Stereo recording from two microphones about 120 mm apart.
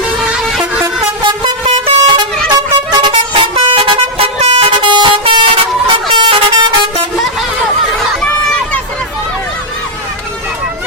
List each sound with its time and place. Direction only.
0.3 s music: 10° right (ahead or behind)
1.6 s vehicle horn: 45° right (ahead or behind)